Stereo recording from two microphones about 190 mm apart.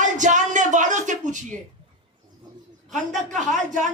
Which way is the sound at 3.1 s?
40° right (ahead or behind).